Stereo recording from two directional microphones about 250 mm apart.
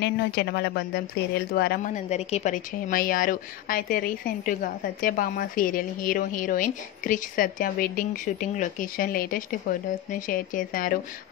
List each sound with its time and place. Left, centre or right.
0.0 s a woman's voice: left